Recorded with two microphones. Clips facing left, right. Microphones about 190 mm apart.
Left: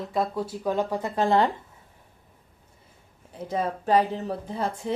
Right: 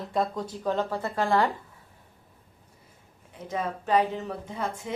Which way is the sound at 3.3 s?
35° left (ahead or behind).